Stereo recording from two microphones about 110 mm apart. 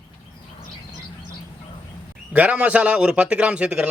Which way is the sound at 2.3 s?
15° right (ahead or behind).